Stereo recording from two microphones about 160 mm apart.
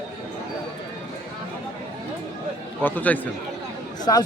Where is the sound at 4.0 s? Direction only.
25° left (ahead or behind).